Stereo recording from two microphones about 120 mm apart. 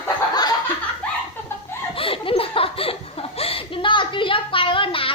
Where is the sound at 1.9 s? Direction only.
50° left (ahead or behind).